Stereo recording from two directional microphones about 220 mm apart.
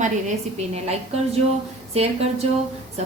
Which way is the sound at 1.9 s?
30° right (ahead or behind).